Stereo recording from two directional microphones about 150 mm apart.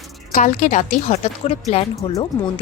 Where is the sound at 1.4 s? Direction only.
40° left (ahead or behind).